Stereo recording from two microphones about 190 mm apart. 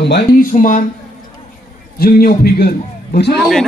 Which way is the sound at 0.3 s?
45° left (ahead or behind).